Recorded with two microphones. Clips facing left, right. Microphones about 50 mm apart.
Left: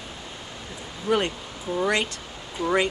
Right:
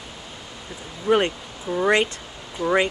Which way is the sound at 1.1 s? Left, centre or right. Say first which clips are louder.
Right 4 dB; right.